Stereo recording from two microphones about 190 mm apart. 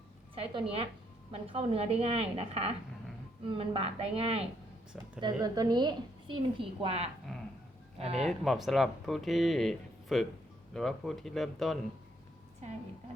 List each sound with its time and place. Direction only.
0.3 s a woman's voice: 30° right (ahead or behind)
5.2 s a woman's voice: 20° right (ahead or behind)
8.3 s speech: centre (ahead or behind)